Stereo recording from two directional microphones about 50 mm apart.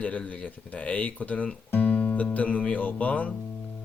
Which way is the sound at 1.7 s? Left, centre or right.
Left.